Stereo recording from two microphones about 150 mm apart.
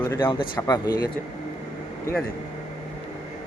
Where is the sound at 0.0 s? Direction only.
15° left (ahead or behind).